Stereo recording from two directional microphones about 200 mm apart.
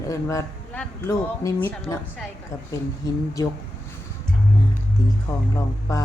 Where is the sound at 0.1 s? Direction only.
15° left (ahead or behind).